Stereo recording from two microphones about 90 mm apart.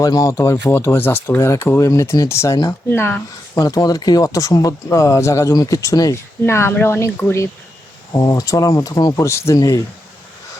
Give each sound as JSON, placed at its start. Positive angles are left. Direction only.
{"t": 0.0, "sound": "speech", "side_deg": 40}
{"t": 3.6, "sound": "speech", "side_deg": 45}
{"t": 8.1, "sound": "speech", "side_deg": 40}